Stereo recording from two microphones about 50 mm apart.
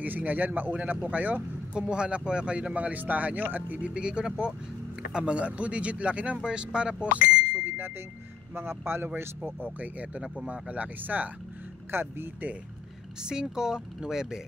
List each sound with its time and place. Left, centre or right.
0.0 s speech: right
1.8 s speech: right
3.8 s speech: right
6.4 s speech: centre
7.6 s vehicle: right
8.5 s a man's voice: right
9.6 s speech: right
11.9 s a man's voice: right
13.2 s speech: centre